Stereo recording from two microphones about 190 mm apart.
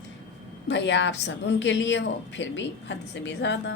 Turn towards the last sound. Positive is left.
turn(degrees=70)  # may be behind; listen again after turning